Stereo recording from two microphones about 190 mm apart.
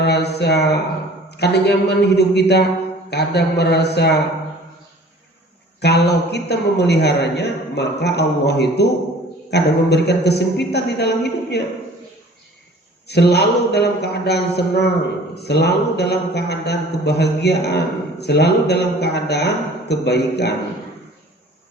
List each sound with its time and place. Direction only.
0.0 s a man's voice: 60° left (ahead or behind)
5.8 s a man's voice: 60° left (ahead or behind)
13.1 s a man's voice: 60° left (ahead or behind)